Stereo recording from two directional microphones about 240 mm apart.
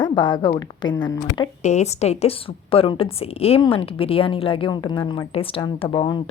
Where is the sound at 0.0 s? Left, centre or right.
Centre.